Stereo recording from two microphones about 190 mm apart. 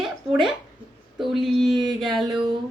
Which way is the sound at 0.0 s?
Centre (ahead or behind).